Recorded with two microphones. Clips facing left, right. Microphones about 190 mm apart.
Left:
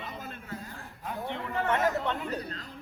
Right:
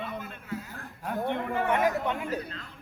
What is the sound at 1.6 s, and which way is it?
Speech, 10° right (ahead or behind).